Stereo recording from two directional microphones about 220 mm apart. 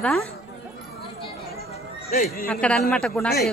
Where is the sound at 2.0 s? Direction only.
40° left (ahead or behind).